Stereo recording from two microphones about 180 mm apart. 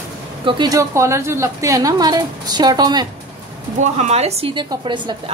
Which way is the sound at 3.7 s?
40° right (ahead or behind).